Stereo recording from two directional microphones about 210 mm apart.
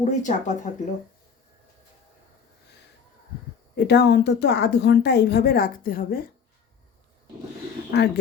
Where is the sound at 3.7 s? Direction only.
50° left (ahead or behind).